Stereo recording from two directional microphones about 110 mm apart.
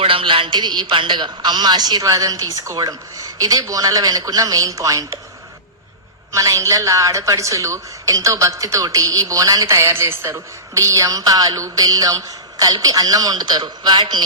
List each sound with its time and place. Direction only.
0.0 s a woman's voice: 55° right (ahead or behind); by 5.0 s 30° right (ahead or behind)
6.3 s a woman's voice: 30° right (ahead or behind)